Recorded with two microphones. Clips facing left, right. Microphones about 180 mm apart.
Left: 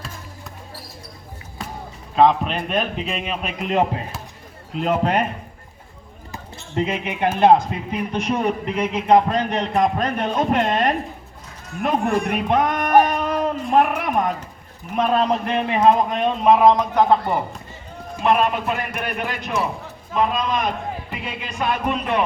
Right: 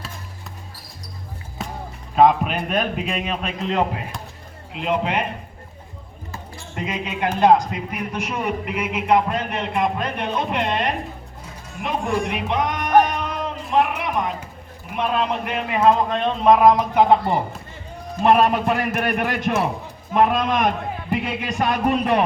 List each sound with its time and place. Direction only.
2.1 s a man's voice: 5° right (ahead or behind)
3.6 s speech: 20° left (ahead or behind)
4.7 s a man's voice: 40° left (ahead or behind)
6.3 s a sound: 25° left (ahead or behind)
7.3 s a man's voice: 25° left (ahead or behind); by 10.9 s 45° left (ahead or behind)
11.8 s a sound: 50° left (ahead or behind)
14.9 s a man's voice: 40° left (ahead or behind)
16.0 s a man's voice: 10° left (ahead or behind)
16.7 s speech: 15° right (ahead or behind)
18.2 s music: 40° right (ahead or behind)
20.1 s a man's voice: 55° right (ahead or behind)
21.1 s music: 50° right (ahead or behind)